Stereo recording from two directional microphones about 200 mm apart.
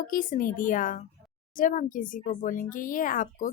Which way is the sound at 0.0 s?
45° left (ahead or behind).